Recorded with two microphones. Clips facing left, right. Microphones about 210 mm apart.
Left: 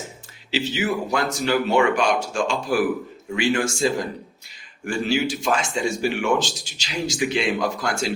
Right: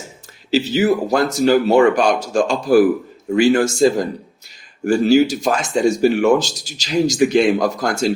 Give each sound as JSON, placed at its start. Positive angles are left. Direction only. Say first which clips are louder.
{"t": 0.5, "sound": "speech", "louder": "right 8 dB", "side_deg": -40}